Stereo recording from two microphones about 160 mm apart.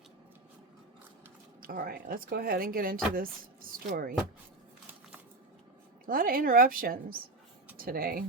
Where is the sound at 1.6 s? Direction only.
65° right (ahead or behind).